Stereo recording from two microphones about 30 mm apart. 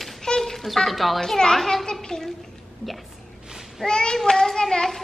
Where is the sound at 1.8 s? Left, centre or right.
Left.